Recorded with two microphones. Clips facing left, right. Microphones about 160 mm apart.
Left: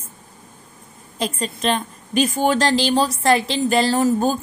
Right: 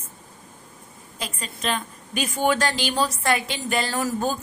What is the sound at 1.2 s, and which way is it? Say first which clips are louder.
A woman's voice: left 8 dB; 40° left (ahead or behind).